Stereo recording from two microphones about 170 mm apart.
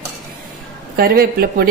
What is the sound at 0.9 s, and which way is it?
Speech, 65° right (ahead or behind).